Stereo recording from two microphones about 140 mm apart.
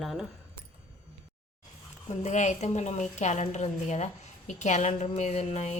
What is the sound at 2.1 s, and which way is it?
A woman's voice, 55° left (ahead or behind).